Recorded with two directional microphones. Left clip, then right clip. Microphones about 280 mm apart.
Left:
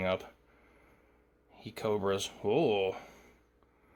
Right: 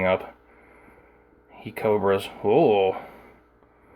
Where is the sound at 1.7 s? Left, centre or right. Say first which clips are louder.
Right 10 dB; left.